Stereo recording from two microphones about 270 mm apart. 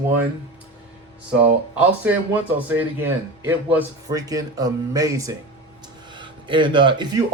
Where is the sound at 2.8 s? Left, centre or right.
Centre.